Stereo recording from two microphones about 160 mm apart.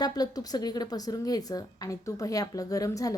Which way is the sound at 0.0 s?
25° left (ahead or behind).